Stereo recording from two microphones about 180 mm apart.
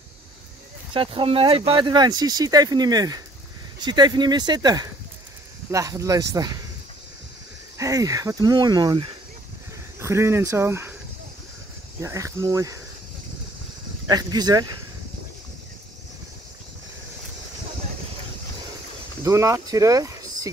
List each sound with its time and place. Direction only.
0.9 s speech: 30° right (ahead or behind)
7.7 s speech: 20° right (ahead or behind)
12.0 s speech: 15° right (ahead or behind)
14.0 s speech: 20° right (ahead or behind)
19.2 s speech: 15° right (ahead or behind)